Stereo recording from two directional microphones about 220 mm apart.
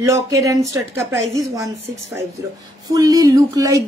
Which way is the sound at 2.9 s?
15° right (ahead or behind).